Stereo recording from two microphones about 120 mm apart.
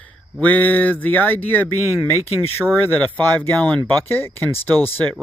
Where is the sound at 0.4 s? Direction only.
15° left (ahead or behind).